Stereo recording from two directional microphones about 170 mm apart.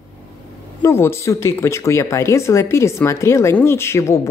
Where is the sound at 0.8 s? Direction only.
15° left (ahead or behind).